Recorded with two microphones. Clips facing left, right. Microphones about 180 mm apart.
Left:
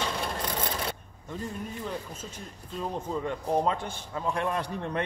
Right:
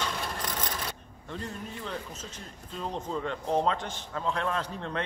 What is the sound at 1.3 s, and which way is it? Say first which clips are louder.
A man's voice: left 2 dB; 10° left (ahead or behind).